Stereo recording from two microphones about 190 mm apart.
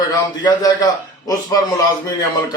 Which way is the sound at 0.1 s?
20° left (ahead or behind).